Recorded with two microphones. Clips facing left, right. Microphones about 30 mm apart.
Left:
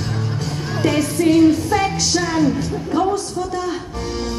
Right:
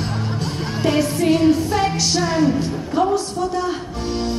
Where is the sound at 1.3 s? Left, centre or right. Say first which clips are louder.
Left 3 dB; centre.